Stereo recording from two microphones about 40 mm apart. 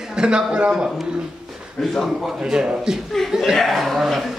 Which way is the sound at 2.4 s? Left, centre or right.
Centre.